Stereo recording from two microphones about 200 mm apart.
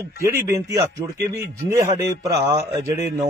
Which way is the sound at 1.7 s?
15° right (ahead or behind).